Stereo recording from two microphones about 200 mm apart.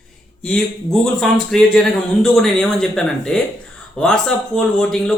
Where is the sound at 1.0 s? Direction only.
Centre (ahead or behind).